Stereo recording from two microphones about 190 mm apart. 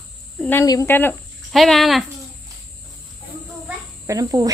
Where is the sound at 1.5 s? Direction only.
Centre (ahead or behind).